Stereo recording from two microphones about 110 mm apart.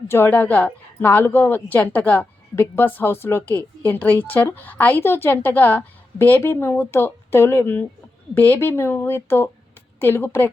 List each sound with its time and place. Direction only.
0.1 s a woman's voice: 20° left (ahead or behind)